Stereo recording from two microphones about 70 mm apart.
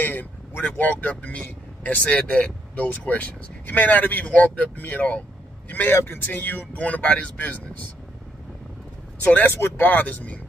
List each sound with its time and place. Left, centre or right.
0.0 s speech: left
9.2 s speech: left